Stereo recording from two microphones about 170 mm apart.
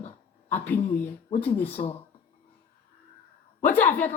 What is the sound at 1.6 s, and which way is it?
Speech, 35° left (ahead or behind).